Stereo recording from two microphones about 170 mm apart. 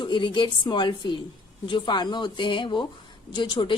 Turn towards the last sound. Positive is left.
turn(degrees=25)  # may be behind; listen again after turning